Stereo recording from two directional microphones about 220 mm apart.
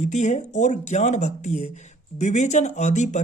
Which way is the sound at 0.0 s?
35° left (ahead or behind).